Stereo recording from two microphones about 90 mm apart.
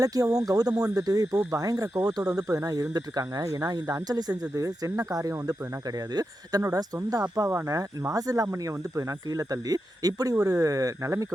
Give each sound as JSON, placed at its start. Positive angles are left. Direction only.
{"t": 0.0, "sound": "speech", "side_deg": -45}